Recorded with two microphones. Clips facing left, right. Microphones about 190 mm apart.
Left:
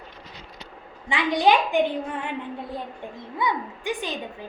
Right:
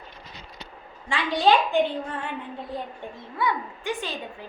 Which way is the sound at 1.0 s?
15° left (ahead or behind).